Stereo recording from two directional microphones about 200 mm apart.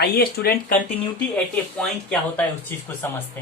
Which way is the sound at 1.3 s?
5° left (ahead or behind).